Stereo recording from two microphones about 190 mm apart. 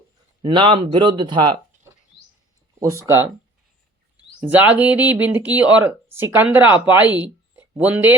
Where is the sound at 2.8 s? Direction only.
15° right (ahead or behind).